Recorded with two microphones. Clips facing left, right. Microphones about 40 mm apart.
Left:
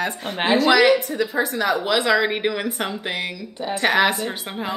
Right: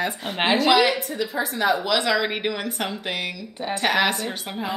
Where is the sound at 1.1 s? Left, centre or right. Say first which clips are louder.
Left 4 dB; left.